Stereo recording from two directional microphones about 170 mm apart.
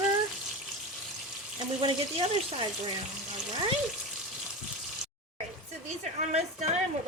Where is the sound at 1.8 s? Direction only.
35° right (ahead or behind).